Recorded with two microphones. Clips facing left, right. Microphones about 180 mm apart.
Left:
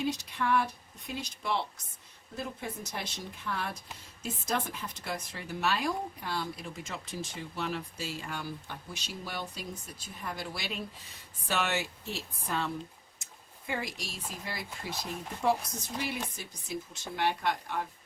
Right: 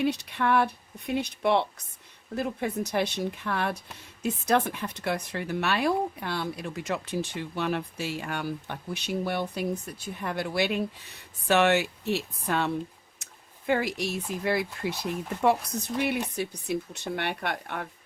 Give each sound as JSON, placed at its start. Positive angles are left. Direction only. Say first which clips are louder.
{"t": 0.0, "sound": "speech", "louder": "right 5 dB", "side_deg": -65}